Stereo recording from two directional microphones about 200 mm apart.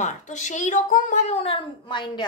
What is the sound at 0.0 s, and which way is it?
Speech, 35° left (ahead or behind).